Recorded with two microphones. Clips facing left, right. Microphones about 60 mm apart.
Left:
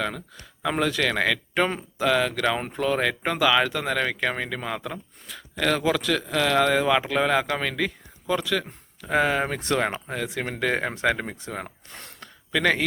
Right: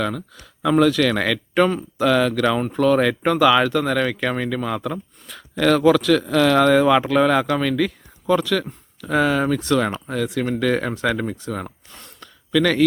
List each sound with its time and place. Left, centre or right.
0.6 s speech: centre
11.9 s a sound: left
12.5 s speech: left